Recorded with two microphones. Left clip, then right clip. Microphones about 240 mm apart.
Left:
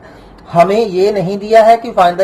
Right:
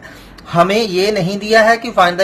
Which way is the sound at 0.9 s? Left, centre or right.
Centre.